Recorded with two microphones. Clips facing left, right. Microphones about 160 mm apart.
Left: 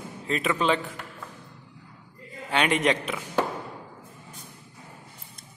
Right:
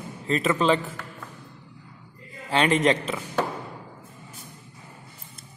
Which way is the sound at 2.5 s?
Centre (ahead or behind).